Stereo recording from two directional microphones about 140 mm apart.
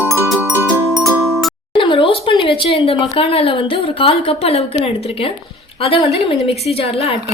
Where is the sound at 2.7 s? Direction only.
40° left (ahead or behind).